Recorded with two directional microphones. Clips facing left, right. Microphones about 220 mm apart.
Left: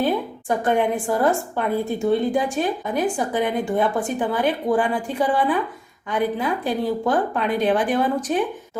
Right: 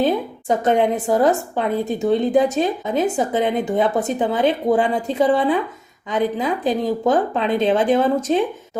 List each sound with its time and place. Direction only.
0.0 s a woman's voice: 20° right (ahead or behind)